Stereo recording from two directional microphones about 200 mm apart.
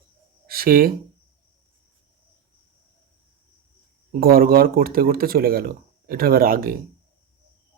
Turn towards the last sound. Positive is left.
turn(degrees=-45)  # may be behind; listen again after turning